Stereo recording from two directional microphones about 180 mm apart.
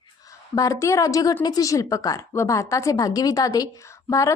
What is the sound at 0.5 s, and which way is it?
A woman's voice, 20° left (ahead or behind).